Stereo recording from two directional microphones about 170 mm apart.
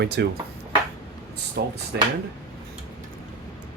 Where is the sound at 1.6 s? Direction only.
80° right.